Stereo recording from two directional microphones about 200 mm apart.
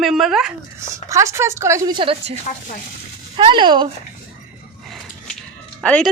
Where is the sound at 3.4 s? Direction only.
25° right (ahead or behind).